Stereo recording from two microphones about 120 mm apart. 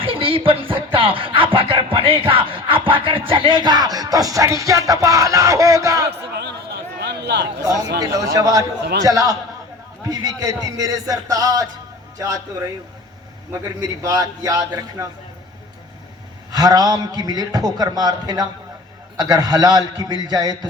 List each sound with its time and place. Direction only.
0.0 s a sound: 50° right (ahead or behind)
0.9 s music: 45° right (ahead or behind); by 6.1 s 25° right (ahead or behind)
7.6 s a man's voice: 30° right (ahead or behind)
14.0 s a man's voice: 30° right (ahead or behind)
16.5 s music: 30° right (ahead or behind)